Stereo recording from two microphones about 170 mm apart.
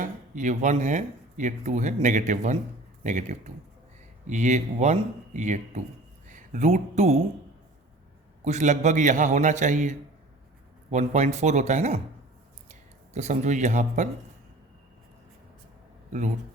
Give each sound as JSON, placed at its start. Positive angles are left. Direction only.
{"t": 0.0, "sound": "speech", "side_deg": -50}
{"t": 8.4, "sound": "speech", "side_deg": -45}
{"t": 10.9, "sound": "speech", "side_deg": -45}
{"t": 13.1, "sound": "speech", "side_deg": -45}